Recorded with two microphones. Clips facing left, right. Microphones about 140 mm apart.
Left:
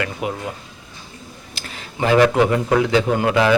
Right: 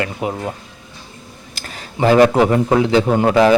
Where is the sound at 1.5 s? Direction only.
40° right (ahead or behind).